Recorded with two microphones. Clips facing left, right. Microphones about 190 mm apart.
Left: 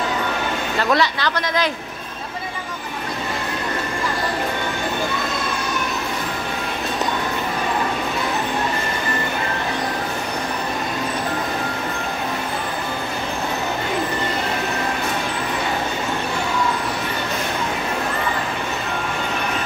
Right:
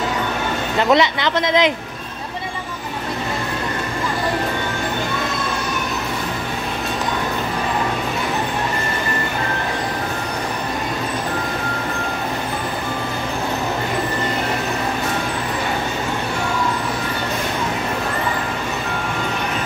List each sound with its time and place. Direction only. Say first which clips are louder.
0.7 s speech: right 4 dB; 20° right (ahead or behind)